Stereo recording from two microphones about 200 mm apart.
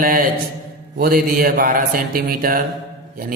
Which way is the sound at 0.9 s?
50° right (ahead or behind).